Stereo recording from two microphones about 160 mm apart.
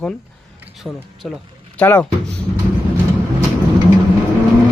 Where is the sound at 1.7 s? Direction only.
10° left (ahead or behind).